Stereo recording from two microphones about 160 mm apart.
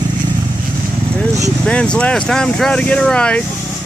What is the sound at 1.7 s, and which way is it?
Speech, 5° left (ahead or behind).